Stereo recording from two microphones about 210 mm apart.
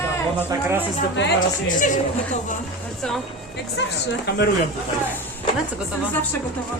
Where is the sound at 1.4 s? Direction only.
40° left (ahead or behind).